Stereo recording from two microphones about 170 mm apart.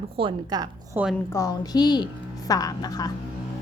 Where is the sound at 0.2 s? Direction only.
25° right (ahead or behind).